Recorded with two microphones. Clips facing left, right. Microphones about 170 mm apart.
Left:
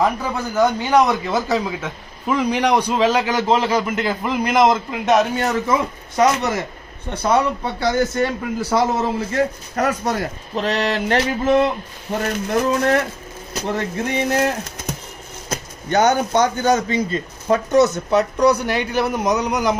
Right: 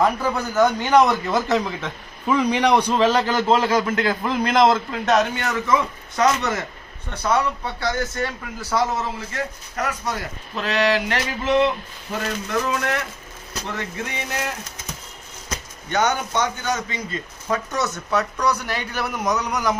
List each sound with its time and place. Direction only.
0.0 s a man's voice: centre (ahead or behind)
5.4 s speech: 30° left (ahead or behind)
7.1 s a man's voice: 20° left (ahead or behind); by 14.5 s 40° left (ahead or behind)
15.5 s a man's voice: 35° left (ahead or behind); by 19.8 s 20° left (ahead or behind)